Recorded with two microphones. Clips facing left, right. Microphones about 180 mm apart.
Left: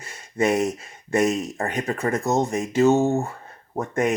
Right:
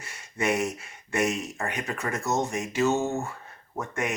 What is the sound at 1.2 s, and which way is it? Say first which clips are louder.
Speech: left 4 dB; 35° left (ahead or behind).